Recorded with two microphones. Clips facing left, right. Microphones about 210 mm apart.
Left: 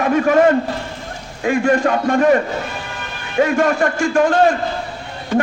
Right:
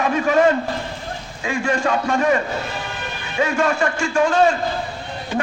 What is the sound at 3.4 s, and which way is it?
A man's voice, 50° left (ahead or behind).